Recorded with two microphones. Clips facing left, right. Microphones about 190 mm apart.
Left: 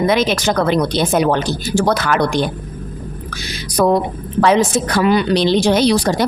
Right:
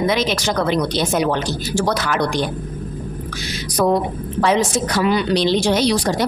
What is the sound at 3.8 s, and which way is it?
Speech, 75° left (ahead or behind).